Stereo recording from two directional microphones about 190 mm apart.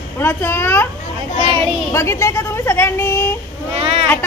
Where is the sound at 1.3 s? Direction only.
25° right (ahead or behind).